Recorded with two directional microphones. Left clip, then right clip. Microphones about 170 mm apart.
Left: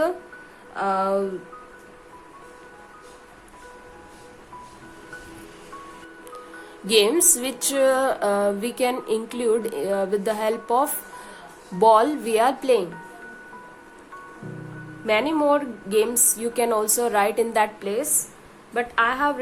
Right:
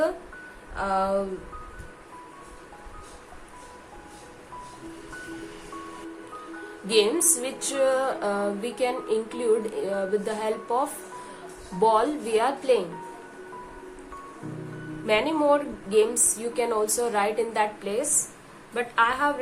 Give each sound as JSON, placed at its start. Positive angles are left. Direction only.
{"t": 0.8, "sound": "music", "side_deg": 45}
{"t": 6.8, "sound": "music", "side_deg": 50}
{"t": 15.0, "sound": "speech", "side_deg": 40}
{"t": 16.6, "sound": "music", "side_deg": 45}
{"t": 18.7, "sound": "speech", "side_deg": 40}